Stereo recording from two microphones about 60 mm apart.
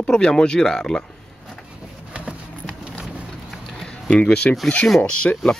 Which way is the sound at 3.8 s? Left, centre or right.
Centre.